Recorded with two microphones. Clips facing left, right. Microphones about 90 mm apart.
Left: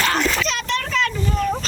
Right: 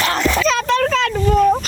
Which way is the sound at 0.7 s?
90° right.